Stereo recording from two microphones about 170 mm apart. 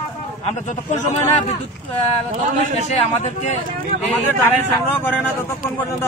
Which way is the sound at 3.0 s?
40° left (ahead or behind).